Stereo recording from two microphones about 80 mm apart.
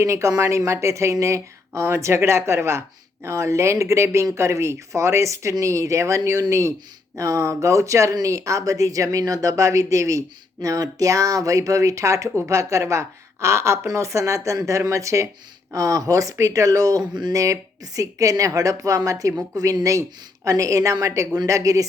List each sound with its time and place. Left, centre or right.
0.0 s speech: right